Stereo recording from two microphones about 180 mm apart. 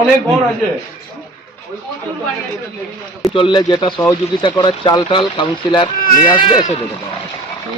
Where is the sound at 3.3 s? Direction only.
30° left (ahead or behind).